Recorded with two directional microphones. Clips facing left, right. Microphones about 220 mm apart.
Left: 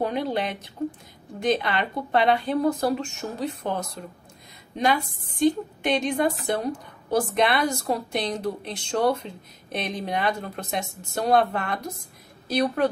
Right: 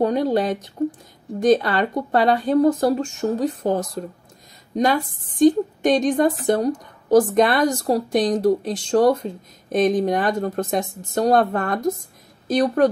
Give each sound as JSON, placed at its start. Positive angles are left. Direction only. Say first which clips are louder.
{"t": 0.0, "sound": "a woman's voice", "louder": "right 7 dB", "side_deg": -40}